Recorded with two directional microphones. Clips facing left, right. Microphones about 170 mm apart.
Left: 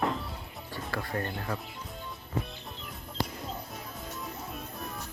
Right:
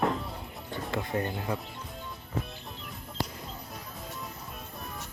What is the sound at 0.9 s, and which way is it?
Speech, 20° right (ahead or behind).